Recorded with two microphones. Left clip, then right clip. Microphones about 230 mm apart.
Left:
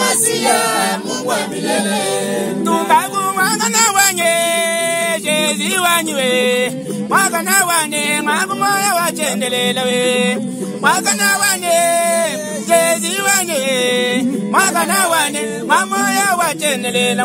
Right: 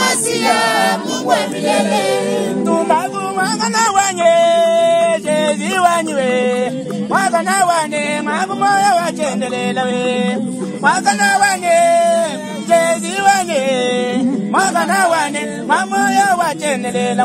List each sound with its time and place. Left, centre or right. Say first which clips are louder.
0.0 s choir: even; centre
2.7 s music: left 2 dB; left
10.8 s a man's voice: right 2 dB; left